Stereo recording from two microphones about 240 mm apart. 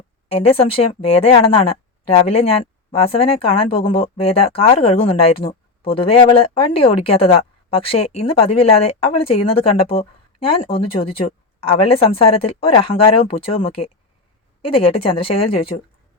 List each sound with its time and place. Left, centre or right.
0.3 s speech: left